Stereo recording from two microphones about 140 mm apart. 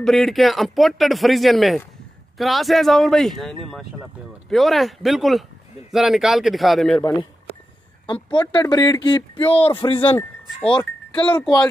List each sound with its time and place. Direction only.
0.0 s speech: centre (ahead or behind)
7.0 s speech: 20° left (ahead or behind)
8.1 s speech: 35° left (ahead or behind)
9.5 s speech: 40° left (ahead or behind)
11.1 s speech: 10° left (ahead or behind)